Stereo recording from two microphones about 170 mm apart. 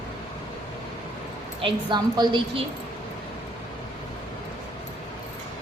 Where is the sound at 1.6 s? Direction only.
25° right (ahead or behind).